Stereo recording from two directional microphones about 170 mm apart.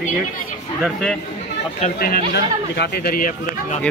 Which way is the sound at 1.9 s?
60° left (ahead or behind).